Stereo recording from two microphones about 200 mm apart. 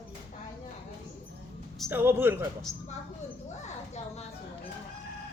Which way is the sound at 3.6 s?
35° left (ahead or behind).